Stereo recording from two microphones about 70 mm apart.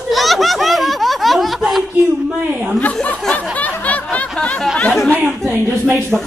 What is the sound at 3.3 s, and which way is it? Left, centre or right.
Snicker, left.